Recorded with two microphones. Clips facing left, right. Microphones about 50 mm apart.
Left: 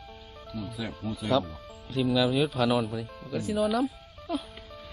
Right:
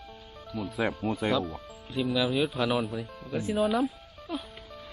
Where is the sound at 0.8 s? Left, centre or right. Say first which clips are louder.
Right 9 dB; right.